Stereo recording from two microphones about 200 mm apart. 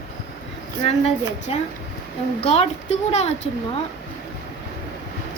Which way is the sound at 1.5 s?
30° left (ahead or behind).